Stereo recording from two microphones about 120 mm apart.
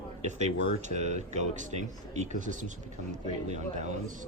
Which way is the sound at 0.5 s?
75° right (ahead or behind).